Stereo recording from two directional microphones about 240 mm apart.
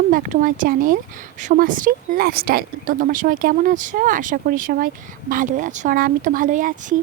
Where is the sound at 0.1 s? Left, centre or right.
Right.